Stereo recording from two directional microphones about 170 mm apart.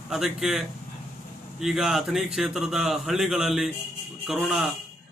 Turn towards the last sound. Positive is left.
turn(degrees=0)  # may be behind; listen again after turning